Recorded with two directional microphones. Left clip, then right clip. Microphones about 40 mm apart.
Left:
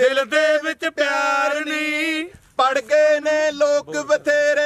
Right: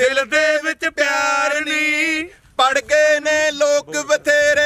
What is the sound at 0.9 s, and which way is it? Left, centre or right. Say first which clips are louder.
Chant: right 1 dB; right.